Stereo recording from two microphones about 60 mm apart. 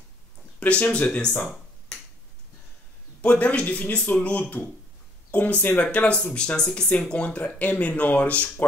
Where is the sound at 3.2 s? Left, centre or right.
Left.